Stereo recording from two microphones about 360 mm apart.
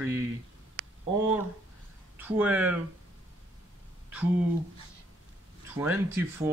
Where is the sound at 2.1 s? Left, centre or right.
Centre.